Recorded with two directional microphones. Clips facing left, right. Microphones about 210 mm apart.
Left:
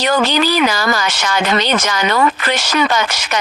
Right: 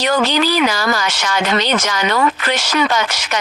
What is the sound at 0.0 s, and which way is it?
Speech, 50° left (ahead or behind).